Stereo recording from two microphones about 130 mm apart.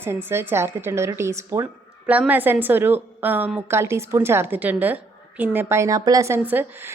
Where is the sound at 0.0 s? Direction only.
20° right (ahead or behind).